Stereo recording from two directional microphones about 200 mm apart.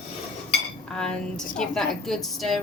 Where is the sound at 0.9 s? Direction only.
5° left (ahead or behind).